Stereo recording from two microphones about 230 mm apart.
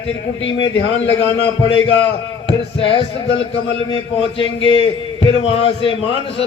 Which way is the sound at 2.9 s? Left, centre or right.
Left.